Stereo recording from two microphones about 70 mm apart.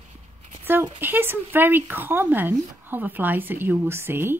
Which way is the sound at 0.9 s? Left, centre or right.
Right.